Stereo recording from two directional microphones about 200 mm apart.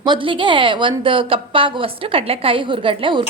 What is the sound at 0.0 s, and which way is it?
A woman's voice, 25° right (ahead or behind).